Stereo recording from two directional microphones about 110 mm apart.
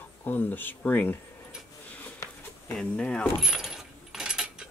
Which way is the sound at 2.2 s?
30° left (ahead or behind).